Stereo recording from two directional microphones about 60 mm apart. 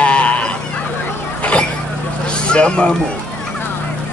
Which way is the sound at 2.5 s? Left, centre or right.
Centre.